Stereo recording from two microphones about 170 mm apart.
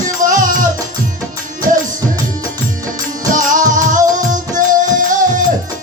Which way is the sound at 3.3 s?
50° right (ahead or behind).